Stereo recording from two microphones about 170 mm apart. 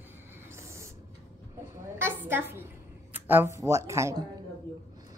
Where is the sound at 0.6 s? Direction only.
15° right (ahead or behind).